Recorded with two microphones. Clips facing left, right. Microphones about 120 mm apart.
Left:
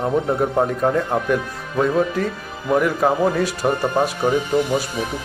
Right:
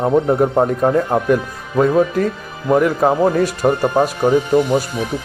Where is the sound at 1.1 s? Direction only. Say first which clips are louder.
Right 4 dB; 5° right (ahead or behind).